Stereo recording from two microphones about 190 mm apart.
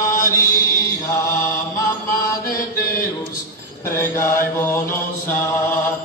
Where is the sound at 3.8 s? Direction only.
15° left (ahead or behind).